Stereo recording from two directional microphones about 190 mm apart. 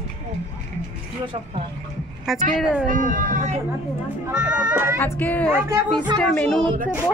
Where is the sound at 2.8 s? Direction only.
45° right (ahead or behind).